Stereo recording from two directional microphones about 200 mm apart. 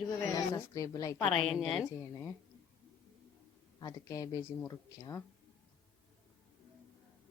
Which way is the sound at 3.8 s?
20° left (ahead or behind).